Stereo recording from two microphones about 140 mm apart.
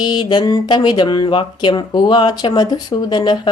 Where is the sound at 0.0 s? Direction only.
30° left (ahead or behind).